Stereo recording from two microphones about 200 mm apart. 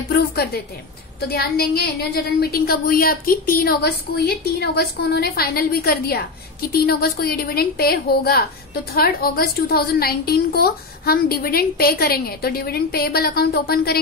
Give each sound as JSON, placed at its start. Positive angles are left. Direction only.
{"t": 0.1, "sound": "music", "side_deg": 50}
{"t": 1.2, "sound": "a woman's voice", "side_deg": 50}